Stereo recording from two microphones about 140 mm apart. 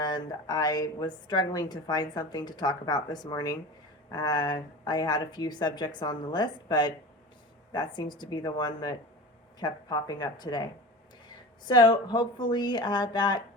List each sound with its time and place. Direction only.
0.0 s a woman's voice: 30° left (ahead or behind)
11.7 s a woman's voice: 30° left (ahead or behind)